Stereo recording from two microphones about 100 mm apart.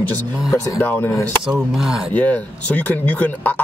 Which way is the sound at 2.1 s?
15° left (ahead or behind).